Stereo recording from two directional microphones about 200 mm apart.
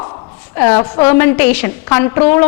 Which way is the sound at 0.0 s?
20° left (ahead or behind).